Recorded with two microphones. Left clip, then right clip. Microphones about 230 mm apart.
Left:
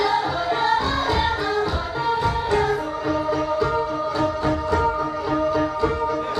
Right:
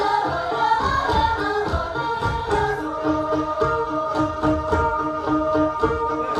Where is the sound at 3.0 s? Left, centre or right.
Centre.